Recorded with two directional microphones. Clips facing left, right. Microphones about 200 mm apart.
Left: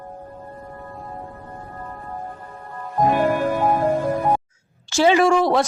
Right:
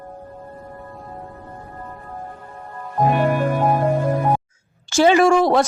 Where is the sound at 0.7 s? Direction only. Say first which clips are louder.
Left 1 dB; centre (ahead or behind).